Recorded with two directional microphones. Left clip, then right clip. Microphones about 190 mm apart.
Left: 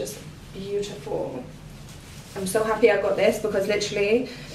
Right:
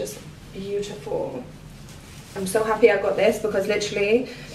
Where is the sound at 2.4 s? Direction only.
15° right (ahead or behind).